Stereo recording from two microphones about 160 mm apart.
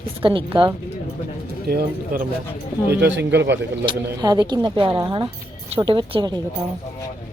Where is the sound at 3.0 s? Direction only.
90° right.